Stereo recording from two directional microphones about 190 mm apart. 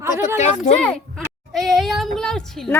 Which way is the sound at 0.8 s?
5° left (ahead or behind).